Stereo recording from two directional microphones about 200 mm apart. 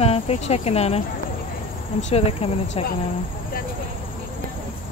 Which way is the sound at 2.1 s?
30° left (ahead or behind).